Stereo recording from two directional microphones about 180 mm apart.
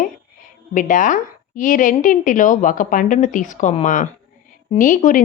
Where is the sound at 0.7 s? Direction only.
45° left (ahead or behind).